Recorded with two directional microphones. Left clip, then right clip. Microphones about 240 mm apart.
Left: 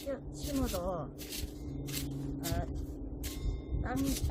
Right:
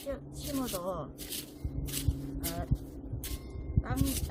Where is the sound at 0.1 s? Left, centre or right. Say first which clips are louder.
Even; right.